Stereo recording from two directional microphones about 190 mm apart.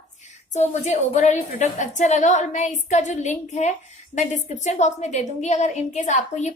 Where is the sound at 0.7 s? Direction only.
40° left (ahead or behind).